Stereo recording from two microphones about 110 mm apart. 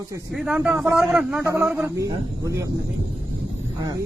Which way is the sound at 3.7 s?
35° right (ahead or behind).